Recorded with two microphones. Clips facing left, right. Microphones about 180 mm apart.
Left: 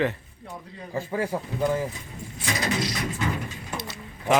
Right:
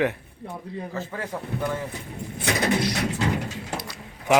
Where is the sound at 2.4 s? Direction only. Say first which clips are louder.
Right 4 dB; 60° right (ahead or behind).